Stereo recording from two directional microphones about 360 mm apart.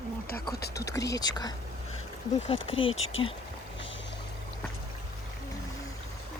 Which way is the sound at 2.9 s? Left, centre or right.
Left.